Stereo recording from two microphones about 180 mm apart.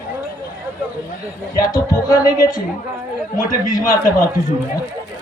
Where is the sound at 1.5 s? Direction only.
20° left (ahead or behind).